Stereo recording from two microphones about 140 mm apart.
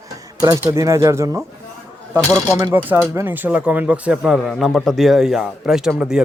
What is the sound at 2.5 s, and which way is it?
Speech, 15° right (ahead or behind).